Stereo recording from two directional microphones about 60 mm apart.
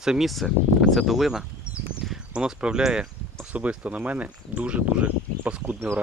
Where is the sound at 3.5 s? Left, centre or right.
Right.